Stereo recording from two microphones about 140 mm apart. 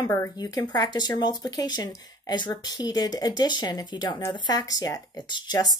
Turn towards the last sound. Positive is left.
turn(degrees=30)  # may be behind; listen again after turning